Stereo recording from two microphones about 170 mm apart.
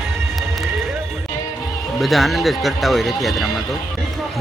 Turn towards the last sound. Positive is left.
turn(degrees=0)  # may be behind; listen again after turning